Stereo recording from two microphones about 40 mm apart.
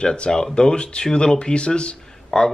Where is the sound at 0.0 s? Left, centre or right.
Left.